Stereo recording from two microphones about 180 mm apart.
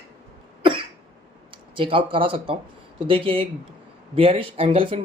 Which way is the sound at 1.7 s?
30° right (ahead or behind).